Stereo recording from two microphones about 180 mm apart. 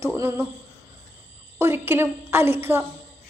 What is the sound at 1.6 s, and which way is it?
A woman's voice, 10° right (ahead or behind).